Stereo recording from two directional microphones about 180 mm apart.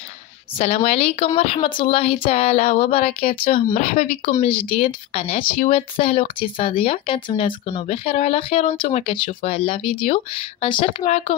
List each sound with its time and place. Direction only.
0.6 s speech: 35° left (ahead or behind)
3.7 s speech: 45° left (ahead or behind)